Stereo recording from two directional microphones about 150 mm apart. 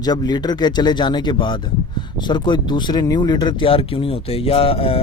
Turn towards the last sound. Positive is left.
turn(degrees=40)  # may be behind; listen again after turning